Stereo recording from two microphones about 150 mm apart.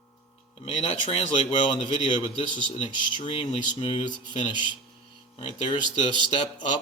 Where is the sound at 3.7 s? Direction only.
35° left (ahead or behind).